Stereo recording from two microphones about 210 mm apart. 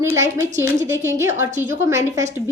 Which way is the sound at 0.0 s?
15° right (ahead or behind).